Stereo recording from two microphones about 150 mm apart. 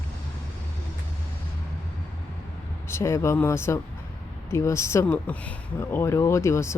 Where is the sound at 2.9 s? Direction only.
15° left (ahead or behind).